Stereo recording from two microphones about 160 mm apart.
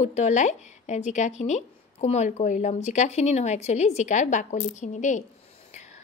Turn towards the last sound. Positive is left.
turn(degrees=50)  # may be behind; listen again after turning